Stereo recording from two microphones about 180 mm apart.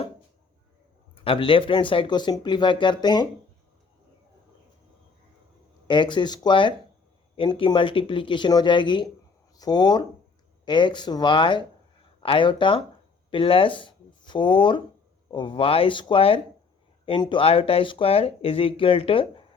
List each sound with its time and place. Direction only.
1.1 s speech: 30° left (ahead or behind)
5.9 s speech: 25° left (ahead or behind)